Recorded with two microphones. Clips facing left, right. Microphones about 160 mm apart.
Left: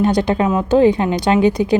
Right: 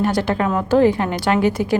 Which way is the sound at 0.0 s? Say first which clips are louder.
Left 3 dB; 20° left (ahead or behind).